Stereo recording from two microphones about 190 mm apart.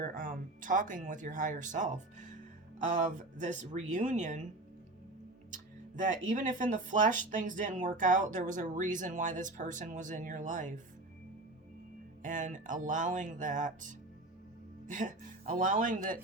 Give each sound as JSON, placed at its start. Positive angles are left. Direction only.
{"t": 0.0, "sound": "speech", "side_deg": -45}
{"t": 6.0, "sound": "speech", "side_deg": -45}
{"t": 12.2, "sound": "speech", "side_deg": -40}